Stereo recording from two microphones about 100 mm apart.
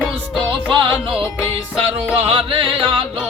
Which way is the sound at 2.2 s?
65° right (ahead or behind).